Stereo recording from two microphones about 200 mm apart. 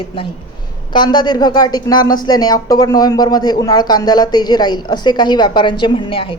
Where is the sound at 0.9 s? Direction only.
20° left (ahead or behind).